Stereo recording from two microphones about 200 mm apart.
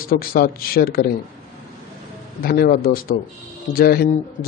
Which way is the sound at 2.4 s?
50° left (ahead or behind).